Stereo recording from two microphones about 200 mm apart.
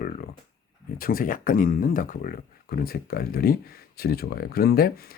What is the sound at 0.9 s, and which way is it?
Speech, 45° left (ahead or behind).